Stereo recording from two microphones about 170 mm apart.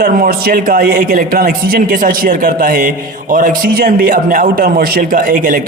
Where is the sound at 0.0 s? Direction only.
60° right (ahead or behind).